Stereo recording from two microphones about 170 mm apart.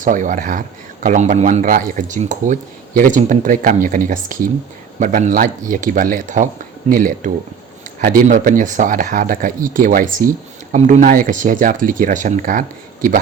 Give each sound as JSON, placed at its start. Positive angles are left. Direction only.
{"t": 0.0, "sound": "speech", "side_deg": -50}